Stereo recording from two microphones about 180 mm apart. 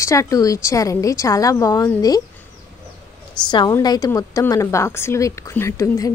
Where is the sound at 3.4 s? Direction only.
25° left (ahead or behind).